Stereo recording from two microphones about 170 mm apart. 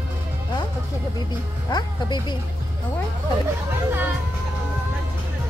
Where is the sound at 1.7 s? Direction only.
25° left (ahead or behind).